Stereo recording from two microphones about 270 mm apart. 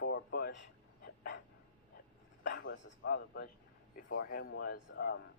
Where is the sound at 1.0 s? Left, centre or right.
Left.